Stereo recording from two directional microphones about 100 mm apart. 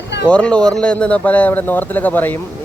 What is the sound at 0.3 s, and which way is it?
Speech, 10° left (ahead or behind).